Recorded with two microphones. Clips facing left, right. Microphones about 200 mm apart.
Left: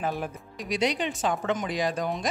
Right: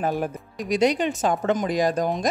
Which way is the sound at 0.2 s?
45° right (ahead or behind).